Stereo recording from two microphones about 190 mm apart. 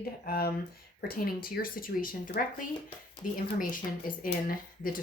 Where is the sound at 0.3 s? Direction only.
55° left (ahead or behind).